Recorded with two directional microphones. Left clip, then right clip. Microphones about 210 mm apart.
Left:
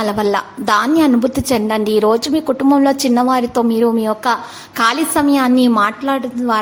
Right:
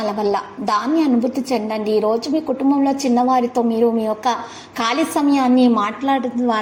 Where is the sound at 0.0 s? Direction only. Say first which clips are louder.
Left 3 dB; 25° left (ahead or behind).